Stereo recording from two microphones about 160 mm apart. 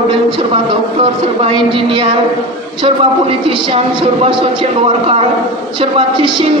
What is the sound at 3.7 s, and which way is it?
A woman's voice, 35° right (ahead or behind).